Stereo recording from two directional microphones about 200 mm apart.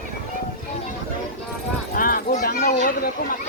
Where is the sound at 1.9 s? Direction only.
45° left (ahead or behind).